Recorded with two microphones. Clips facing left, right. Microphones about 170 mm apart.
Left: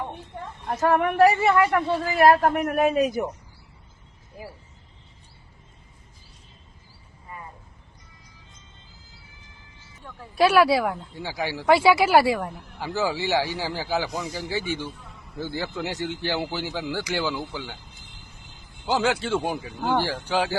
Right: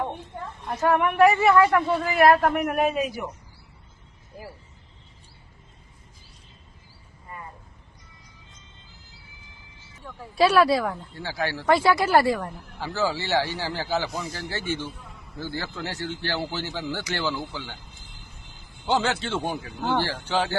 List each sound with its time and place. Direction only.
0.8 s speech: 40° left (ahead or behind)
10.2 s speech: centre (ahead or behind)
11.1 s speech: 15° left (ahead or behind)
18.9 s speech: 10° left (ahead or behind)